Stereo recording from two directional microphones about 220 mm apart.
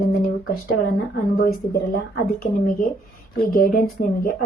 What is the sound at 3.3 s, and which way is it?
Speech, 40° left (ahead or behind).